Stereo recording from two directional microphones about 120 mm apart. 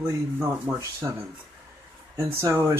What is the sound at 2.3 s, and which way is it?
Speech, 20° right (ahead or behind).